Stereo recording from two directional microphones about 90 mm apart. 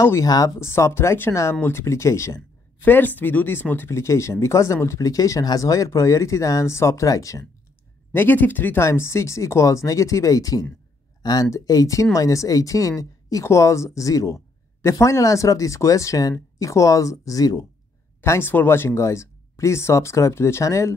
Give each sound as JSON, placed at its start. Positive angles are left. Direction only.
{"t": 0.0, "sound": "speech", "side_deg": 30}
{"t": 8.1, "sound": "speech", "side_deg": 20}
{"t": 18.2, "sound": "speech", "side_deg": 30}